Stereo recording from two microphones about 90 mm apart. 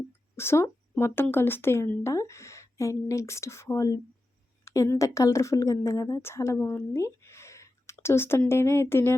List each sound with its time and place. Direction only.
0.3 s a woman's voice: 30° left (ahead or behind)